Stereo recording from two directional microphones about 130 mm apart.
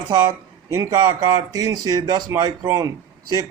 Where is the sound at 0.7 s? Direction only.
25° right (ahead or behind).